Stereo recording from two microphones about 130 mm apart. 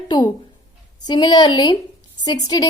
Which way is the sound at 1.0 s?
35° left (ahead or behind).